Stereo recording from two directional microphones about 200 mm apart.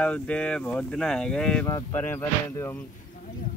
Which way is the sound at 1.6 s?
15° left (ahead or behind).